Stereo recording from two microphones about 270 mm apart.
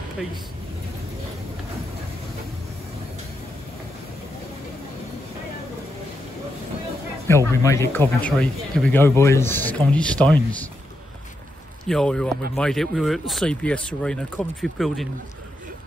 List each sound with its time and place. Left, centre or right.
7.2 s speech: centre
11.9 s speech: centre